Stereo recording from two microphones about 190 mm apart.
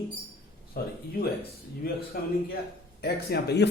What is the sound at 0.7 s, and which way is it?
Speech, 55° left (ahead or behind).